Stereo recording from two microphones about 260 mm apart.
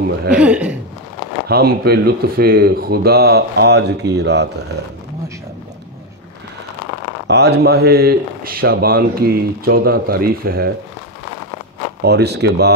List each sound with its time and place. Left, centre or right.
0.3 s speech: centre
1.5 s speech: right
7.2 s speech: right
12.0 s speech: right